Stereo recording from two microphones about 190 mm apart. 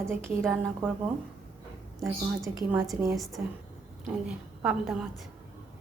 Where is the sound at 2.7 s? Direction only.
Centre (ahead or behind).